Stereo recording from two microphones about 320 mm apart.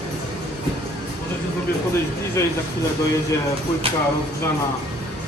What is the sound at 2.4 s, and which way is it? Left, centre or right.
Speech, centre.